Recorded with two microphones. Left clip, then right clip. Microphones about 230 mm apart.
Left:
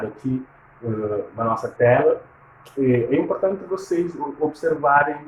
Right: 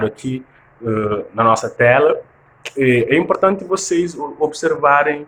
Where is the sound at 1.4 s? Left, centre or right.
Right.